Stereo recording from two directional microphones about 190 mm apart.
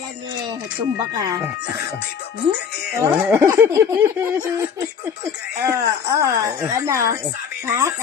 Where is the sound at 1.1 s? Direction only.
20° right (ahead or behind).